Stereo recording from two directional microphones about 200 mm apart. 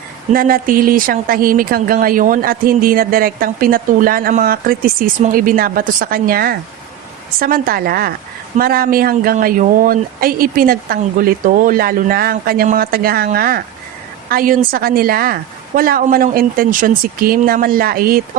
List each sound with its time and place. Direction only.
0.3 s speech: 45° right (ahead or behind)